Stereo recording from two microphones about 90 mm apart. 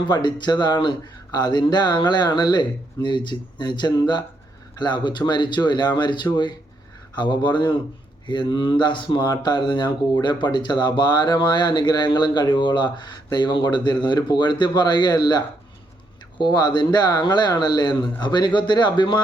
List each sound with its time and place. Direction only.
0.0 s speech: 60° left (ahead or behind)